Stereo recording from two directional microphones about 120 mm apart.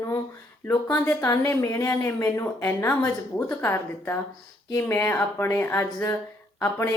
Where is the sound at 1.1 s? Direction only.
30° left (ahead or behind).